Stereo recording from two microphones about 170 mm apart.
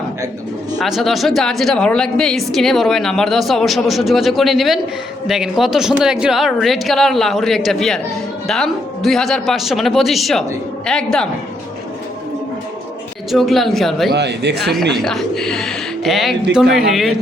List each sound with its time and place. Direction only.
0.8 s a woman's voice: centre (ahead or behind)
13.3 s a woman's voice: centre (ahead or behind)
14.1 s speech: 80° right
15.0 s a woman's voice: 5° left (ahead or behind)